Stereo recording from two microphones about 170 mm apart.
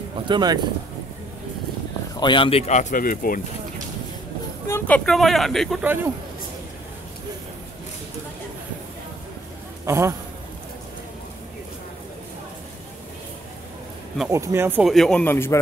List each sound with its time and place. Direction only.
0.3 s speech: 25° right (ahead or behind)
2.1 s speech: 30° left (ahead or behind); by 3.3 s 55° left (ahead or behind)
4.6 s speech: 10° left (ahead or behind)
5.9 s speech: 15° right (ahead or behind)
9.8 s speech: 15° right (ahead or behind)
14.3 s speech: 15° right (ahead or behind)
14.8 s a man's voice: centre (ahead or behind)